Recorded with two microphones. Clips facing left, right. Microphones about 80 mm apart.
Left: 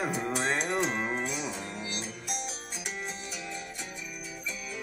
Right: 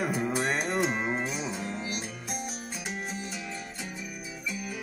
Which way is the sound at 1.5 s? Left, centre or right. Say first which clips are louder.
Right 3 dB; right.